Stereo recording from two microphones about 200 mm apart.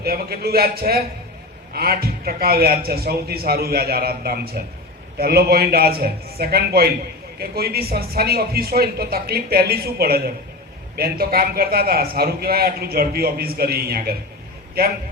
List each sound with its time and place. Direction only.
0.0 s a man's voice: 50° right (ahead or behind)